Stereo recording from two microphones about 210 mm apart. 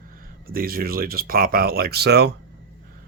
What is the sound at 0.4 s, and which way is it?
Speech, 45° right (ahead or behind).